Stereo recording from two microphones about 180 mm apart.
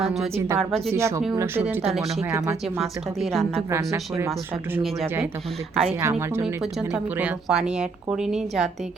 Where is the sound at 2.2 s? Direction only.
15° right (ahead or behind).